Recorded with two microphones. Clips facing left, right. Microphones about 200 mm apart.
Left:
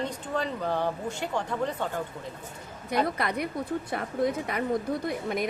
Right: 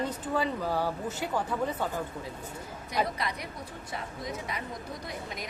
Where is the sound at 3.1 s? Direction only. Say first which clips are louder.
Left 6 dB; 55° left (ahead or behind).